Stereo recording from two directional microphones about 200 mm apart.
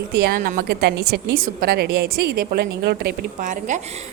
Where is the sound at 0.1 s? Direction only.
50° right (ahead or behind).